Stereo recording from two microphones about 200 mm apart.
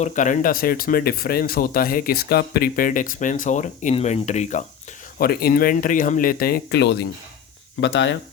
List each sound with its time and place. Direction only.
0.0 s speech: 40° left (ahead or behind)
5.1 s speech: 50° left (ahead or behind); by 8.2 s 65° left (ahead or behind)